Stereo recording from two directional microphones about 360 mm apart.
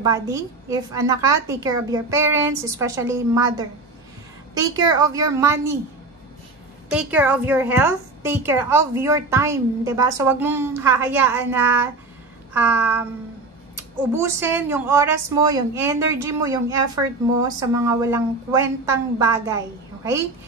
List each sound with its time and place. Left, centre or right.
0.0 s a woman's voice: centre
4.7 s a woman's voice: centre
6.9 s a woman's voice: centre
12.5 s a sound: centre
14.1 s a woman's voice: centre